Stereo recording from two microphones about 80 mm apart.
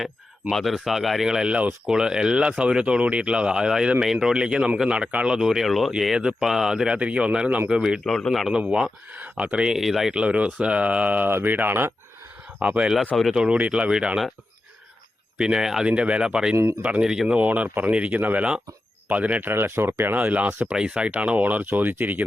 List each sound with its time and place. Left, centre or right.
0.5 s speech: centre
8.0 s speech: centre
8.5 s speech: centre
12.5 s speech: centre
13.1 s speech: centre
13.4 s speech: centre
15.4 s speech: centre
19.5 s speech: right
20.1 s speech: centre